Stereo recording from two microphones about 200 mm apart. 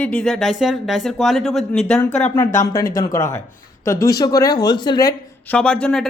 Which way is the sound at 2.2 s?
10° left (ahead or behind).